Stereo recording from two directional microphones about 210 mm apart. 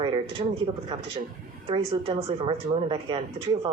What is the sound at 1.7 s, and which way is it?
A woman's voice, 25° right (ahead or behind).